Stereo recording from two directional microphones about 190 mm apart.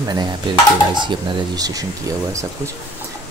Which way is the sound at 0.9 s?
25° right (ahead or behind).